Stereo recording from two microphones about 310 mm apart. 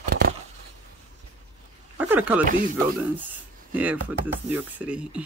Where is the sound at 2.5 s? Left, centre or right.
Right.